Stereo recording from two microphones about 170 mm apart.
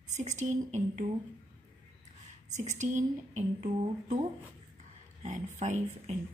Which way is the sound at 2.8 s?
45° right (ahead or behind).